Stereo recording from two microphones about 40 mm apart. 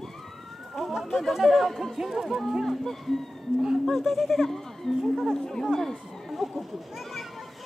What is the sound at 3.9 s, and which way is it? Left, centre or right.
Speech, centre.